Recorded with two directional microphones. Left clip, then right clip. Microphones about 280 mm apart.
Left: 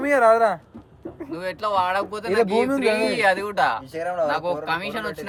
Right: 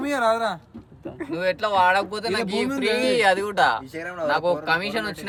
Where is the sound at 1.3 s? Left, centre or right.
Right.